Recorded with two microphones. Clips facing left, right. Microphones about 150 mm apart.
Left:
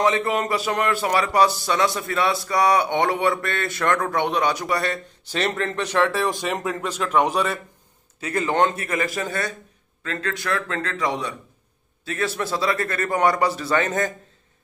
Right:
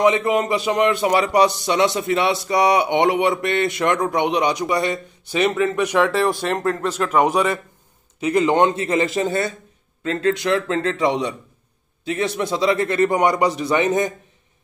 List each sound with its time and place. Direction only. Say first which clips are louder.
0.0 s speech: right 4 dB; 15° right (ahead or behind)
6.3 s speech: right 4 dB; 10° left (ahead or behind)
7.1 s speech: right 3 dB; 10° right (ahead or behind)